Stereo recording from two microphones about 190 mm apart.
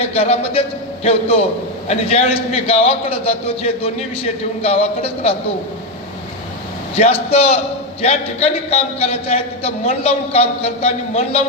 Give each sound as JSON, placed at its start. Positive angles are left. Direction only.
{"t": 0.0, "sound": "a man's voice", "side_deg": 30}
{"t": 6.9, "sound": "a man's voice", "side_deg": 30}